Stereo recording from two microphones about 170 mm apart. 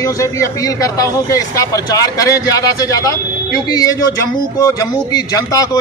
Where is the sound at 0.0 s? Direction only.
20° left (ahead or behind).